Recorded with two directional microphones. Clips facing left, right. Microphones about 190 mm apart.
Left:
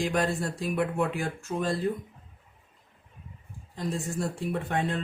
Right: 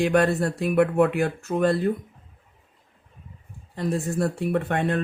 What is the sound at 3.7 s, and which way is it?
Speech, 60° right (ahead or behind).